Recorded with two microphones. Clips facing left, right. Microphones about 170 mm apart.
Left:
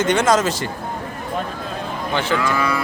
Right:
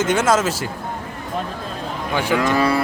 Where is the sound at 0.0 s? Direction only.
5° right (ahead or behind).